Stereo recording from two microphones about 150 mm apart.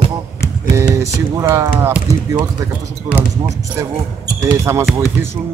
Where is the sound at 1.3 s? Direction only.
20° right (ahead or behind).